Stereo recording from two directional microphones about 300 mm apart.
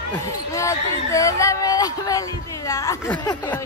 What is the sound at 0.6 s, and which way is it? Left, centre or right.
Speech, centre.